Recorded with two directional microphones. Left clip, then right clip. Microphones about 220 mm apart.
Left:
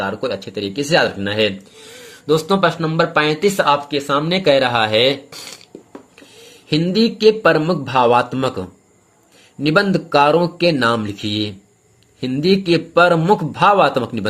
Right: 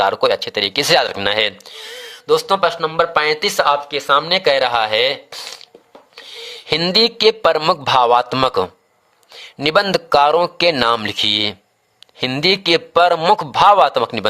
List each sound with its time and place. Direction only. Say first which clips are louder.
0.0 s speech: right 7 dB; 40° right (ahead or behind)
1.8 s speech: right 5 dB; 20° right (ahead or behind)
6.7 s speech: right 3 dB; 40° right (ahead or behind)